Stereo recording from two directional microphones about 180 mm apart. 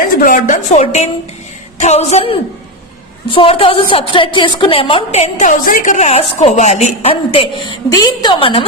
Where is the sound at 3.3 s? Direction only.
30° left (ahead or behind).